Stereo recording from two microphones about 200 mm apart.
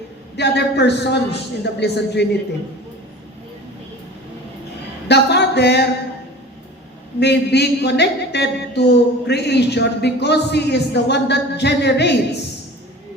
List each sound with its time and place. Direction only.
0.3 s a woman's voice: 55° left (ahead or behind)
5.0 s a sound: 55° left (ahead or behind)
7.2 s a woman's voice: 55° left (ahead or behind)